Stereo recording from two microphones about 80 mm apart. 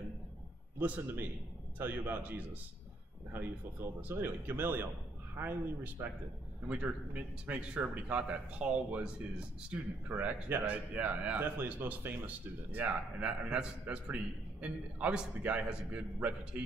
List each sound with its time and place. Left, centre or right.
0.7 s speech: right
4.1 s a man's voice: right